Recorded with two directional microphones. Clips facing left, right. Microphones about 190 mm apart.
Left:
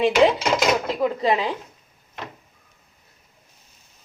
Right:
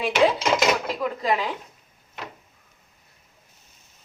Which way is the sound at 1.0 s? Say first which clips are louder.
Left 4 dB; 25° left (ahead or behind).